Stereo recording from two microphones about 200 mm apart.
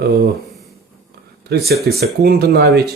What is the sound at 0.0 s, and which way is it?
Speech, 50° right (ahead or behind).